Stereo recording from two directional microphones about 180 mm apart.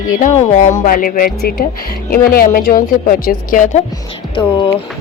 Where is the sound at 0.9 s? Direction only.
50° left (ahead or behind).